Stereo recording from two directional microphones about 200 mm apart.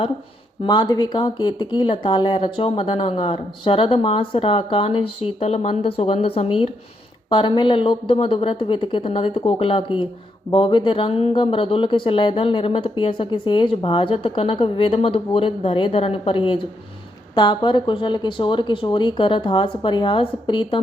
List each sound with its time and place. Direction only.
0.6 s speech: 20° left (ahead or behind)